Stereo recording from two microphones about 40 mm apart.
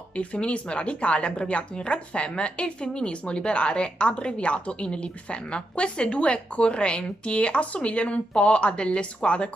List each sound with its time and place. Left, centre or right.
0.1 s a woman's voice: left